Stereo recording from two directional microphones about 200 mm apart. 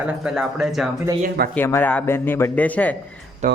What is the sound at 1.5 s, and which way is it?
Speech, 10° left (ahead or behind).